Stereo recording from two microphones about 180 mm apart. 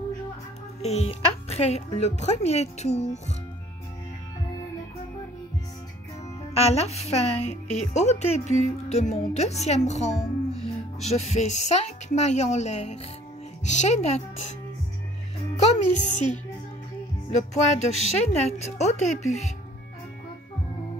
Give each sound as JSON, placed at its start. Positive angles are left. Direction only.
{"t": 0.8, "sound": "speech", "side_deg": 35}
{"t": 6.5, "sound": "speech", "side_deg": 35}
{"t": 15.5, "sound": "speech", "side_deg": 40}